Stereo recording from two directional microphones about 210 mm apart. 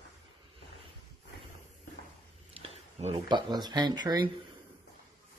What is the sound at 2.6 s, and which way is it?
Speech, 30° right (ahead or behind).